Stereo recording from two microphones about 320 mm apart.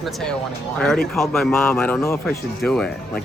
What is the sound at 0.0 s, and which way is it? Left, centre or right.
A man's voice, centre.